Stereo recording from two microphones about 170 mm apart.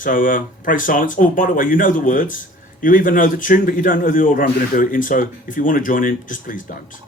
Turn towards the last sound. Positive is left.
turn(degrees=50)  # may be behind; listen again after turning